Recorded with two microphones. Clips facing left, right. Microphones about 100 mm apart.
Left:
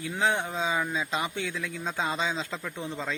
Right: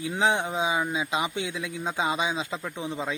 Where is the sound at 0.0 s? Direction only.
20° right (ahead or behind).